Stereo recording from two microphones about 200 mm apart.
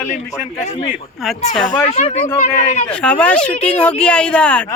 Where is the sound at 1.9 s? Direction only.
30° left (ahead or behind).